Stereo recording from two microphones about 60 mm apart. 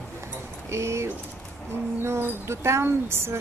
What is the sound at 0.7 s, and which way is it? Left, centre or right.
Speech, right.